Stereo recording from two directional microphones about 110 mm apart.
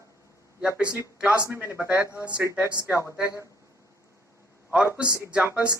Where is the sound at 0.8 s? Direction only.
10° right (ahead or behind).